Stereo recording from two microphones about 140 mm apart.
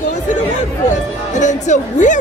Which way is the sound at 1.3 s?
60° left (ahead or behind).